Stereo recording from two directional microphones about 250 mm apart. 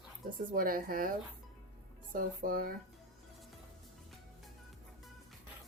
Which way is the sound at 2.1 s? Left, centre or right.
Right.